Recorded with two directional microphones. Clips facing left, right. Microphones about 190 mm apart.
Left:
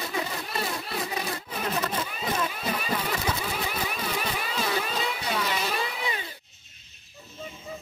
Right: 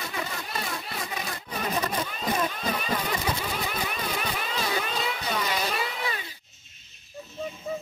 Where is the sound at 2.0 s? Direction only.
5° left (ahead or behind).